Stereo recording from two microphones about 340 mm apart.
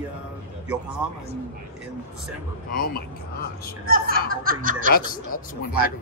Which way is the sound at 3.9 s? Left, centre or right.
Right.